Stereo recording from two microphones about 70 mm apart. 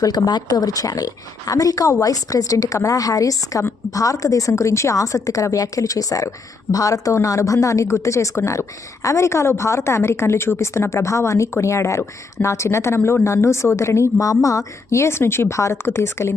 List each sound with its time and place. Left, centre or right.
0.0 s a woman's voice: left